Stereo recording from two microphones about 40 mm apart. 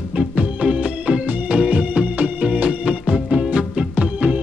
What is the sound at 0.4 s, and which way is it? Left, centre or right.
Organ, right.